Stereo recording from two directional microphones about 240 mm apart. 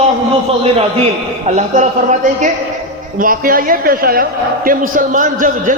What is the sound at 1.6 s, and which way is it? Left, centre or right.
A man's voice, right.